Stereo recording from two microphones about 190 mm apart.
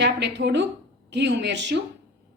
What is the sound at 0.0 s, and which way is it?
A woman's voice, 65° right (ahead or behind).